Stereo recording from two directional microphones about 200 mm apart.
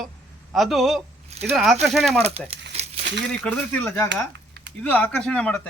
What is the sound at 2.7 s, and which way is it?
Crumpling, 30° right (ahead or behind).